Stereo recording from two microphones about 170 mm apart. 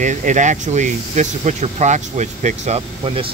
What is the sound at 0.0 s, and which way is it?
Speech, 45° right (ahead or behind).